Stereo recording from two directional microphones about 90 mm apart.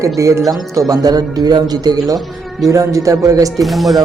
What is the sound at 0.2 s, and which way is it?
Speech, 35° right (ahead or behind).